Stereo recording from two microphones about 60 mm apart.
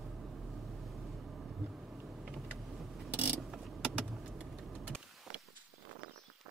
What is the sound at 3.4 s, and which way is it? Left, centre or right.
Vehicle, centre.